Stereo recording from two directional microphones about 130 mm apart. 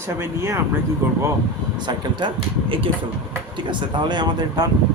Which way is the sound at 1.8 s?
35° right (ahead or behind).